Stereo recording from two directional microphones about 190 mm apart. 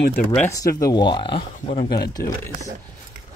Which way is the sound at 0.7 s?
20° left (ahead or behind).